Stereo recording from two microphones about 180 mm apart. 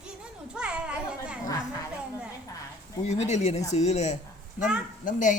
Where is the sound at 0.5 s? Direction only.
5° right (ahead or behind).